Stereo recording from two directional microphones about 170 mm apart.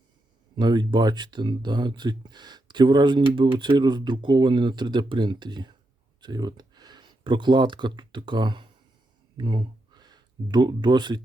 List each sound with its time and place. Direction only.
0.5 s speech: 25° right (ahead or behind)